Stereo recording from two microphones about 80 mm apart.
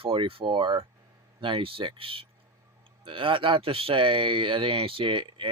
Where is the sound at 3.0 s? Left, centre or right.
Right.